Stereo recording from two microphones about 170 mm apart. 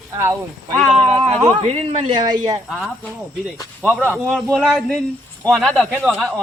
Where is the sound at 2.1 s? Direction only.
25° right (ahead or behind).